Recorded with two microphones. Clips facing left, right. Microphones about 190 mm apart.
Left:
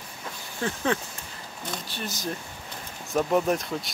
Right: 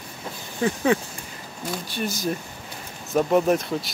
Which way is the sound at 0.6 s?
10° right (ahead or behind).